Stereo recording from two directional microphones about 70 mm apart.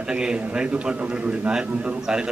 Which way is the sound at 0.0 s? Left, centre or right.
Centre.